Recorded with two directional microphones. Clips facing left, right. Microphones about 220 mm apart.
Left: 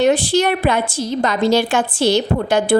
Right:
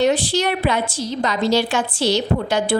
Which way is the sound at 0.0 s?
50° left (ahead or behind).